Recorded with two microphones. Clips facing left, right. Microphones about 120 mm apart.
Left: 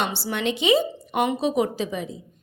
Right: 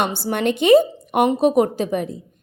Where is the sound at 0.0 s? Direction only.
50° right (ahead or behind).